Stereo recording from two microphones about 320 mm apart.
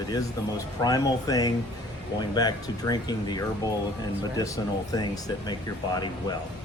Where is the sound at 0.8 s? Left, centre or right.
Centre.